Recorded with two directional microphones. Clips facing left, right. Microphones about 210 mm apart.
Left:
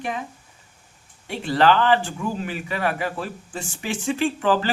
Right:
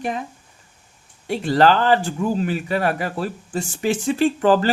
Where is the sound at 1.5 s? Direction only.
40° right (ahead or behind).